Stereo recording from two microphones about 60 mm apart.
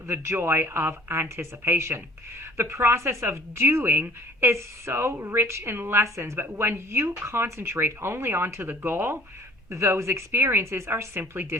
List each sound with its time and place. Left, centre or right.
0.1 s a woman's voice: right
9.6 s a woman's voice: right